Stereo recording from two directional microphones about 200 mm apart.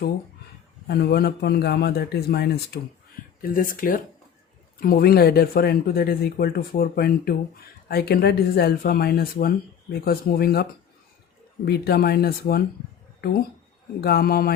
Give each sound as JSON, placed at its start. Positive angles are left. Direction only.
{"t": 0.9, "sound": "speech", "side_deg": 55}
{"t": 3.4, "sound": "speech", "side_deg": 45}